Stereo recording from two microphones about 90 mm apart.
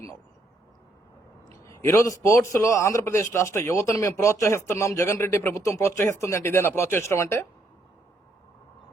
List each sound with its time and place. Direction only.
1.6 s a man's voice: 30° left (ahead or behind)